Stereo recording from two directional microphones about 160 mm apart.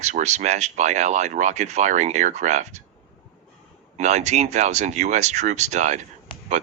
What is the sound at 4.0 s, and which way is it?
Speech, 45° right (ahead or behind).